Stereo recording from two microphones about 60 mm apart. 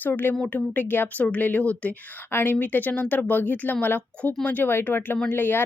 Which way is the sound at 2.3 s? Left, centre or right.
Left.